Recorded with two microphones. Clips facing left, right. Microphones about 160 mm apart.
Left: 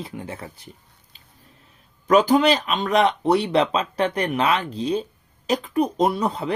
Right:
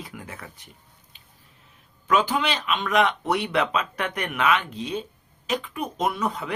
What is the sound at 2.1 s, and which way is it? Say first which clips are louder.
Speech: left 7 dB; 40° left (ahead or behind).